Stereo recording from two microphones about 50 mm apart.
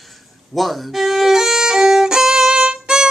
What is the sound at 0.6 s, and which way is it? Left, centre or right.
Violin, centre.